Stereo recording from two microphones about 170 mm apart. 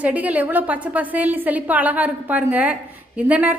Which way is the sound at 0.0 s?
10° right (ahead or behind).